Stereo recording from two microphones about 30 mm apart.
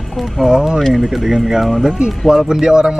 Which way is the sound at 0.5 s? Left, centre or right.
Right.